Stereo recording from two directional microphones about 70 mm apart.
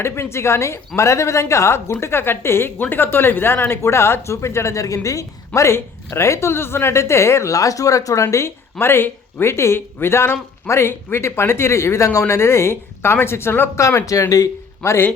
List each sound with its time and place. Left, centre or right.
0.0 s a woman's voice: left
14.0 s a woman's voice: left
14.8 s speech: left